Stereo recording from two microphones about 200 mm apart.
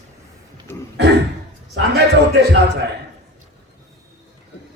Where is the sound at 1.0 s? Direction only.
55° right (ahead or behind).